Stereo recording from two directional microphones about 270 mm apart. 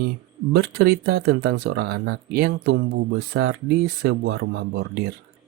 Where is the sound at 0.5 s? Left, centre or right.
Right.